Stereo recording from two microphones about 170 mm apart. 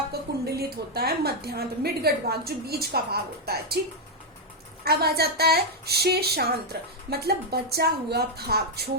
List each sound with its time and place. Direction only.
0.1 s a woman's voice: 70° right (ahead or behind)
4.8 s a woman's voice: 65° right (ahead or behind)